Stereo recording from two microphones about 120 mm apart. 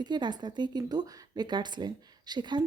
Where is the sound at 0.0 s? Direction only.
40° right (ahead or behind).